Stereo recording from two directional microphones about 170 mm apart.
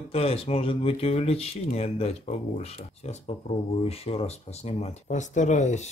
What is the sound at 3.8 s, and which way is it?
Speech, 35° left (ahead or behind).